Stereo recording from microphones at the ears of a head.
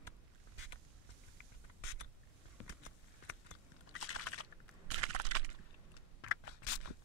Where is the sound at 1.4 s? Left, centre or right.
Left.